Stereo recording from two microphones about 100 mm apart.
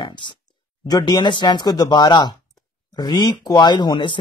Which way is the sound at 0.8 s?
40° left (ahead or behind).